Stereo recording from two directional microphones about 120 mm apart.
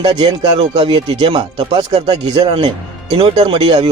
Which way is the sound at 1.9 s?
65° right (ahead or behind).